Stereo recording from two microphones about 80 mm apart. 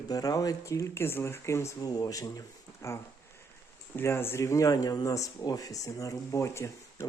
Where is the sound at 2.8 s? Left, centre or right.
Left.